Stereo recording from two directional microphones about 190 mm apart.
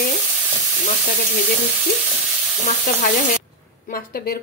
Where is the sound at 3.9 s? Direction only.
50° left (ahead or behind).